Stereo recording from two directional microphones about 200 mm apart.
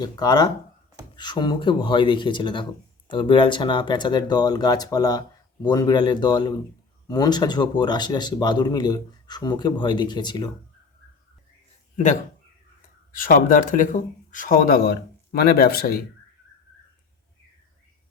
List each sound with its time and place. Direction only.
0.0 s speech: 20° left (ahead or behind)
13.1 s speech: 45° left (ahead or behind)